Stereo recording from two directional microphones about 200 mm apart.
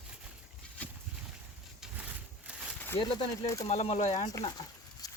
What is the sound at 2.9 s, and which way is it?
Speech, 25° left (ahead or behind).